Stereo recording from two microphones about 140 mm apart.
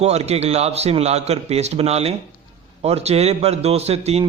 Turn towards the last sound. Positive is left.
turn(degrees=-50)  # may be behind; listen again after turning